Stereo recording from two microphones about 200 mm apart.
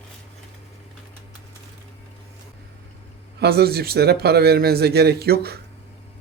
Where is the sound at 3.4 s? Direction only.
50° right (ahead or behind).